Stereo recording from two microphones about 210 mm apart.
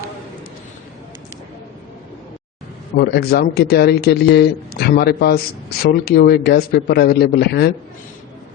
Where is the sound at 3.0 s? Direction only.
50° left (ahead or behind).